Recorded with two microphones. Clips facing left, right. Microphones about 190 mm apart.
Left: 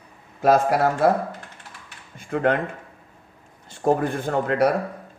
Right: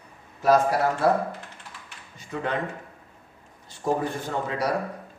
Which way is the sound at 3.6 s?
55° left (ahead or behind).